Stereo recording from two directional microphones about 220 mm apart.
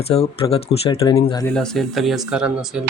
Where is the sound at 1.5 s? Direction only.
Centre (ahead or behind).